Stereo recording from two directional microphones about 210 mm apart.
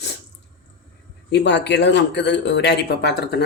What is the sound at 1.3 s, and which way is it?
Speech, 55° left (ahead or behind).